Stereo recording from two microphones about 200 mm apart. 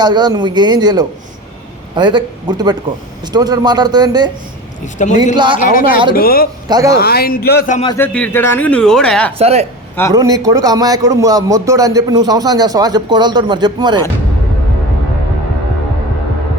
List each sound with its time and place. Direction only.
0.0 s speech: 20° right (ahead or behind)
5.3 s speech: 20° right (ahead or behind)
5.5 s speech: 40° left (ahead or behind)
6.7 s speech: 20° right (ahead or behind)
7.0 s speech: 50° left (ahead or behind)
7.9 s speech: 10° left (ahead or behind)
9.4 s a man's voice: 30° right (ahead or behind)
10.1 s a man's voice: 15° right (ahead or behind)